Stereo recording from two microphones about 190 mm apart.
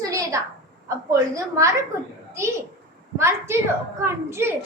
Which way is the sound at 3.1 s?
15° right (ahead or behind).